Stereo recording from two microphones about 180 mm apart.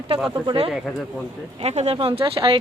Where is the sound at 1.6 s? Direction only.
35° right (ahead or behind).